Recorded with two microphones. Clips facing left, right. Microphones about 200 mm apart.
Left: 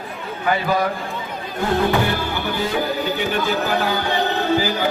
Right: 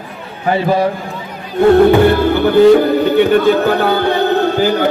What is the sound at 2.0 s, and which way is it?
Speech, 60° right (ahead or behind).